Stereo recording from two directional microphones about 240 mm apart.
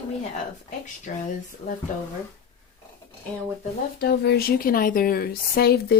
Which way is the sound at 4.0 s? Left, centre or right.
Left.